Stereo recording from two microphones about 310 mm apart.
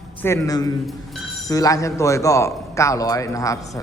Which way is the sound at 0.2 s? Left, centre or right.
Centre.